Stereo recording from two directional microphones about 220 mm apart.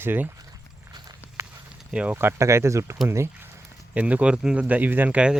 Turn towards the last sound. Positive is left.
turn(degrees=-5)  # may be behind; listen again after turning